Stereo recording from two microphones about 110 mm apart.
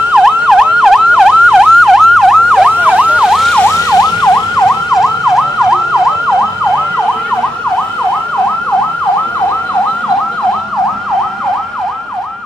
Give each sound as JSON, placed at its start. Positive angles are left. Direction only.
{"t": 0.1, "sound": "emergency vehicle", "side_deg": -5}
{"t": 2.7, "sound": "emergency vehicle", "side_deg": -10}
{"t": 3.9, "sound": "emergency vehicle", "side_deg": 35}
{"t": 4.6, "sound": "emergency vehicle", "side_deg": 5}